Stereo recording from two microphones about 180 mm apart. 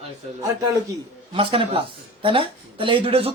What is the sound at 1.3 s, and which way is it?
Speech, 30° right (ahead or behind).